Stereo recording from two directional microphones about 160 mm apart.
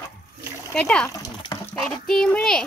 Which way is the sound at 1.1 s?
20° left (ahead or behind).